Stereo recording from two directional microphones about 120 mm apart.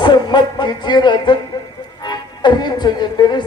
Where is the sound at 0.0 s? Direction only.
40° left (ahead or behind).